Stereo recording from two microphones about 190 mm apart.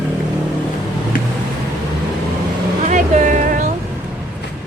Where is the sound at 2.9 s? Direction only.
40° right (ahead or behind).